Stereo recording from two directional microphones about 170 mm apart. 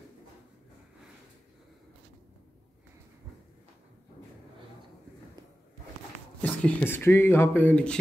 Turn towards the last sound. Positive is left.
turn(degrees=5)  # may be behind; listen again after turning